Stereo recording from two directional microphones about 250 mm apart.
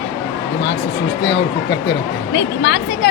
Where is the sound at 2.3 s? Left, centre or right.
Left.